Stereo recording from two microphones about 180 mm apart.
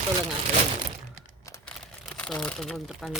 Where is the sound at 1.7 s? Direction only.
5° left (ahead or behind).